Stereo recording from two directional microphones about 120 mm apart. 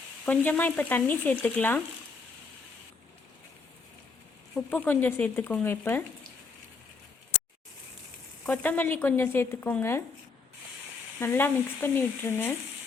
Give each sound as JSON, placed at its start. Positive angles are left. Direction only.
{"t": 0.3, "sound": "speech", "side_deg": 15}
{"t": 4.7, "sound": "speech", "side_deg": 15}
{"t": 8.4, "sound": "speech", "side_deg": 15}
{"t": 11.2, "sound": "speech", "side_deg": 20}